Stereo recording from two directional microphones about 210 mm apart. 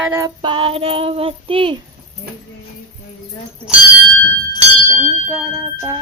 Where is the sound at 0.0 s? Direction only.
10° right (ahead or behind).